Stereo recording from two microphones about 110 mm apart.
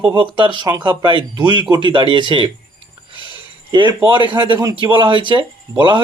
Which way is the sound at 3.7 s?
45° right (ahead or behind).